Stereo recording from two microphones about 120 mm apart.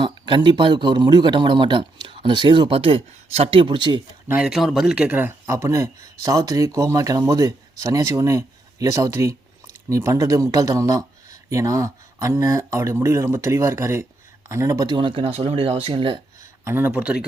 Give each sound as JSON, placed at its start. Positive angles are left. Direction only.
{"t": 0.0, "sound": "speech", "side_deg": -40}
{"t": 4.4, "sound": "speech", "side_deg": 0}
{"t": 5.5, "sound": "speech", "side_deg": -25}
{"t": 14.8, "sound": "speech", "side_deg": -45}
{"t": 16.6, "sound": "speech", "side_deg": -15}